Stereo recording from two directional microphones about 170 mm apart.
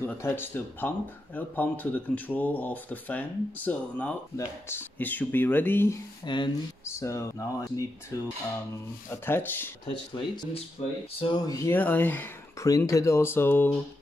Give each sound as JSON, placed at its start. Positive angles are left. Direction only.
{"t": 0.0, "sound": "speech", "side_deg": 15}
{"t": 6.2, "sound": "speech", "side_deg": 25}
{"t": 6.8, "sound": "speech", "side_deg": 15}
{"t": 10.1, "sound": "speech", "side_deg": 25}
{"t": 10.8, "sound": "speech", "side_deg": 40}
{"t": 11.1, "sound": "speech", "side_deg": 25}